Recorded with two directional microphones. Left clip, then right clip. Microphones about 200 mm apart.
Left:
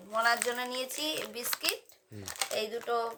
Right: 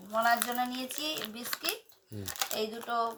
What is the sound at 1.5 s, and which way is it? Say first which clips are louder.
Speech: left 2 dB; 10° left (ahead or behind).